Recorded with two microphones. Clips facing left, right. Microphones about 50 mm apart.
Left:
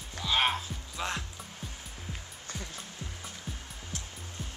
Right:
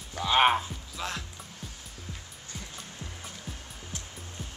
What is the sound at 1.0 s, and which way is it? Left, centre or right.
Speech, centre.